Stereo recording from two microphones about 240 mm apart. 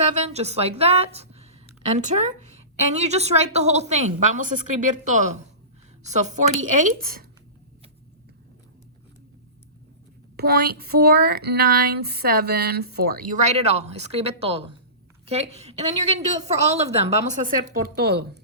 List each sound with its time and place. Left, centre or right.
0.0 s a woman's voice: right
10.3 s a woman's voice: right
17.9 s speech: right